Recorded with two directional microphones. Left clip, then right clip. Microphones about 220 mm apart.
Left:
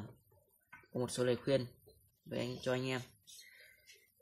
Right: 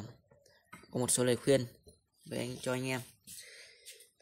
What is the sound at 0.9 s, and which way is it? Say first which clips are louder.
Speech: right 4 dB; 25° right (ahead or behind).